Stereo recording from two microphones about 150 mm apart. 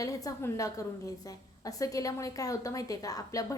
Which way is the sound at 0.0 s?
25° left (ahead or behind).